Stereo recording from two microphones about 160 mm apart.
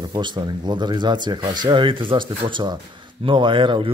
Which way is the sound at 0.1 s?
30° right (ahead or behind).